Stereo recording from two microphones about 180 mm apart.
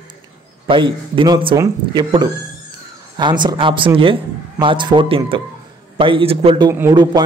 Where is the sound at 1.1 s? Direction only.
25° right (ahead or behind).